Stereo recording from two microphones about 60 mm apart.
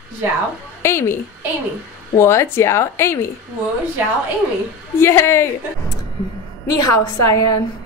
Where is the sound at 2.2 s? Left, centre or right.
Left.